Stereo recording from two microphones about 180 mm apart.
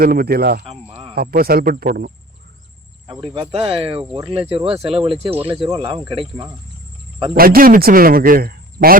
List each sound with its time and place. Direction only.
0.0 s speech: 60° right (ahead or behind)
3.3 s speech: 35° right (ahead or behind)
7.3 s speech: 55° right (ahead or behind)